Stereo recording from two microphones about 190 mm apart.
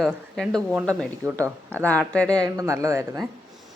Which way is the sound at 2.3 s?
20° right (ahead or behind).